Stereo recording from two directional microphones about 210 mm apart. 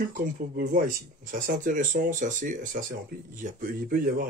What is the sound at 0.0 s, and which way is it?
Speech, 40° right (ahead or behind).